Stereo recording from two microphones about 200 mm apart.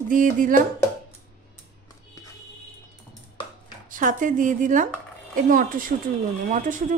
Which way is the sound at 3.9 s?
40° right (ahead or behind).